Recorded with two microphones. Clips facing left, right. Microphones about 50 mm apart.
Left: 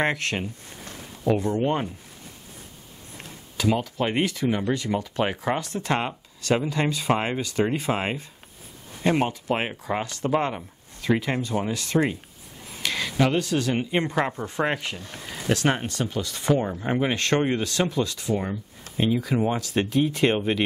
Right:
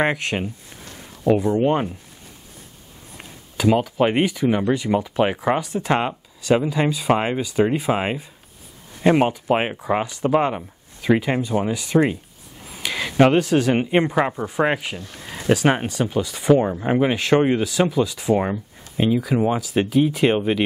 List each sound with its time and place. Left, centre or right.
0.0 s speech: centre
3.2 s speech: centre
12.6 s a sound: centre
13.4 s speech: right
14.0 s speech: centre
18.3 s speech: right
18.9 s speech: centre